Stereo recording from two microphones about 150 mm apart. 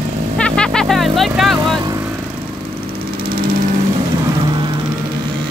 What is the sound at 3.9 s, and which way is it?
Vehicle, 30° right (ahead or behind).